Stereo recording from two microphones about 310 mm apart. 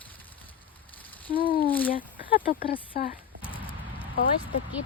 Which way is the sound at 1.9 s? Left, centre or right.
Centre.